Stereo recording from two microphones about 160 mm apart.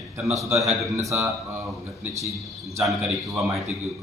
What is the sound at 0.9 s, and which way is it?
Speech, 20° right (ahead or behind).